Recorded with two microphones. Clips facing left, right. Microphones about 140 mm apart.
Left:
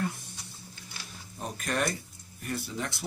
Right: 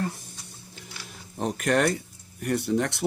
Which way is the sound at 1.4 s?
75° right (ahead or behind).